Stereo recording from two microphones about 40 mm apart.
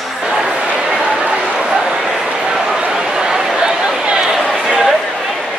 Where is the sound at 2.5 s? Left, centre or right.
Centre.